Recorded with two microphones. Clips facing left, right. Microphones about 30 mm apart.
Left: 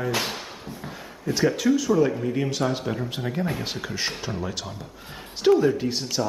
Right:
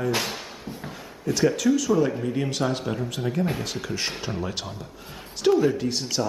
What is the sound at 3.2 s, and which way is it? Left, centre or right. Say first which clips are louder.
Speech: right 4 dB; centre.